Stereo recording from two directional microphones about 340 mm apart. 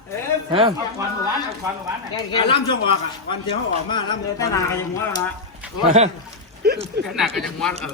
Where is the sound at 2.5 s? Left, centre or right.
Centre.